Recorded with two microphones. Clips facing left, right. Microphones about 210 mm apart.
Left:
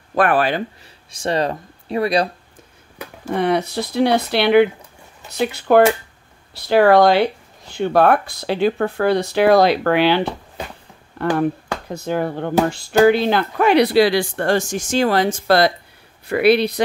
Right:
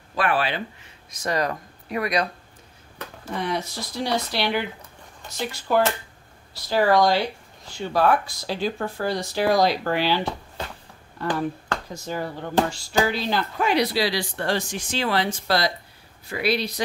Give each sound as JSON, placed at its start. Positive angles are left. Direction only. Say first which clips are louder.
{"t": 0.1, "sound": "speech", "louder": "left 7 dB", "side_deg": 50}
{"t": 1.1, "sound": "speech", "louder": "left 5 dB", "side_deg": 30}
{"t": 3.3, "sound": "speech", "louder": "left 9 dB", "side_deg": 60}